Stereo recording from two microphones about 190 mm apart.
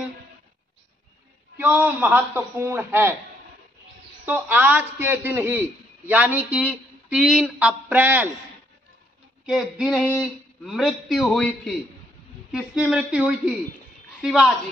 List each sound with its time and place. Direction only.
1.6 s a man's voice: 10° right (ahead or behind)
4.3 s a man's voice: 10° right (ahead or behind)
9.5 s a man's voice: 5° right (ahead or behind)